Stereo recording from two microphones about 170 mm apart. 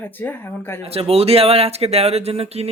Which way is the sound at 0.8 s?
35° right (ahead or behind).